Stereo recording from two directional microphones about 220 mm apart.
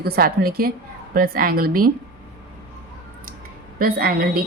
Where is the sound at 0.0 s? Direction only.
45° right (ahead or behind).